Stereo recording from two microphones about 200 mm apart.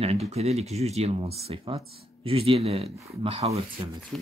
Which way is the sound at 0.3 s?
35° right (ahead or behind).